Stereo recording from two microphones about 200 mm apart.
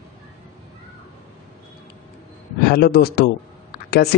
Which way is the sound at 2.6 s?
55° left (ahead or behind).